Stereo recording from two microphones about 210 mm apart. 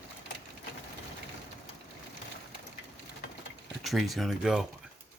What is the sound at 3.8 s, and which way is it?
Speech, centre (ahead or behind).